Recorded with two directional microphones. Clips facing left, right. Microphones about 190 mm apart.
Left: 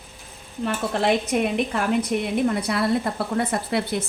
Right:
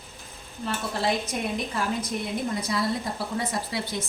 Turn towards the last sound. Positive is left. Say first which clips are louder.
# left 6 dB
turn(degrees=60)  # may be behind; listen again after turning